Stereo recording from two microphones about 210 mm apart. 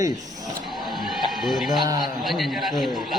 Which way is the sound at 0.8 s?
Centre (ahead or behind).